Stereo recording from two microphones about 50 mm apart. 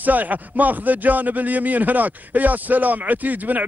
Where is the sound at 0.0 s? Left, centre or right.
Right.